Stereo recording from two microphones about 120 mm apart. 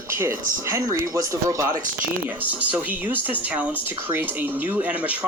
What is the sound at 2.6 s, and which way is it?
Speech, 15° right (ahead or behind).